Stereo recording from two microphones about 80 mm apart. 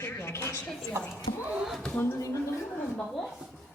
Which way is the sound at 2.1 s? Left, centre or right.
Left.